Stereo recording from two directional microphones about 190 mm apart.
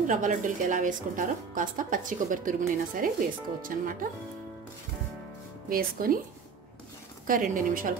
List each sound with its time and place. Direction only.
0.0 s a woman's voice: 40° right (ahead or behind)
5.7 s a woman's voice: 50° right (ahead or behind)
7.2 s a woman's voice: 45° right (ahead or behind)